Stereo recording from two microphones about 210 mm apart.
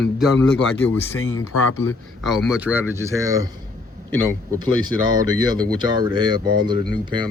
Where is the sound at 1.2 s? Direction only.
75° left (ahead or behind).